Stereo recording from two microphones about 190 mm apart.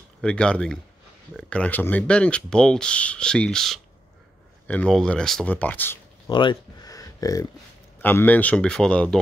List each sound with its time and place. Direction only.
0.2 s speech: 5° left (ahead or behind)
6.2 s a sound: 25° left (ahead or behind)
8.0 s speech: 10° left (ahead or behind)